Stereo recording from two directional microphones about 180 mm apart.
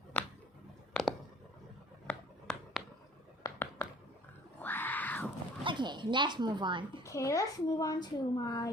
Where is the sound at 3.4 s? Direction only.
20° left (ahead or behind).